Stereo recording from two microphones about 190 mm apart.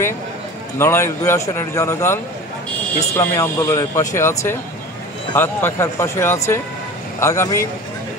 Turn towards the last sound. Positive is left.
turn(degrees=15)  # may be behind; listen again after turning